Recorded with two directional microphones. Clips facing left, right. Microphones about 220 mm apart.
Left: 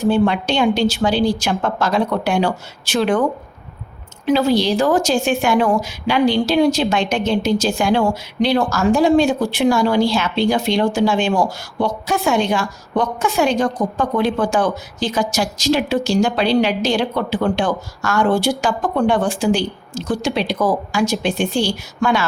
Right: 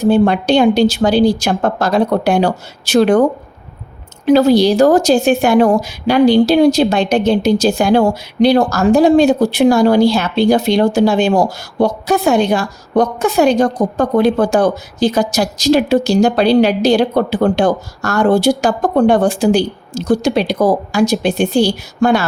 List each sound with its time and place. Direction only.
0.0 s speech: 40° right (ahead or behind)
4.3 s speech: 40° right (ahead or behind)